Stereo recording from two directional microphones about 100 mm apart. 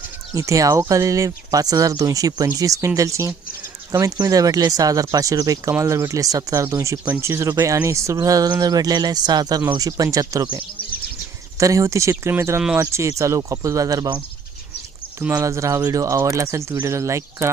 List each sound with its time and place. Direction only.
0.3 s speech: 30° right (ahead or behind)
11.5 s speech: 30° right (ahead or behind)
15.3 s speech: 30° right (ahead or behind)